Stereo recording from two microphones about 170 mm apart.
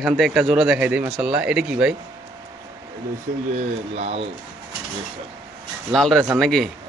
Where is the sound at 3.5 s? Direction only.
35° right (ahead or behind).